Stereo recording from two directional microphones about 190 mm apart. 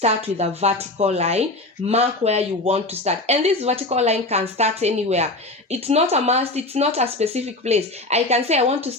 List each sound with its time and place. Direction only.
0.0 s speech: 35° right (ahead or behind)